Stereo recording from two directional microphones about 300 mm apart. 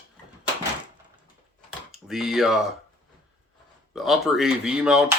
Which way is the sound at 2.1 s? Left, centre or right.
Centre.